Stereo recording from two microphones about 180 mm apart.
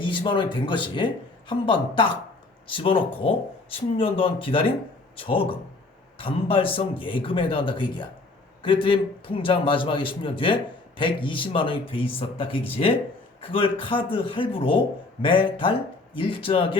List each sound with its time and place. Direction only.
0.0 s a man's voice: 25° left (ahead or behind)